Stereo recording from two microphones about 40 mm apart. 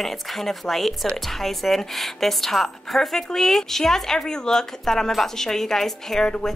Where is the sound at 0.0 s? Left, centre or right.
Centre.